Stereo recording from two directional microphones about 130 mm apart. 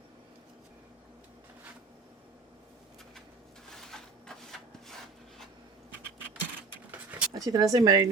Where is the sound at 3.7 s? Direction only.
5° left (ahead or behind).